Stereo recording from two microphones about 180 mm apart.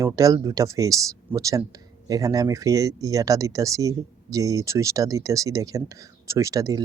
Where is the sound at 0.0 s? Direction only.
20° right (ahead or behind).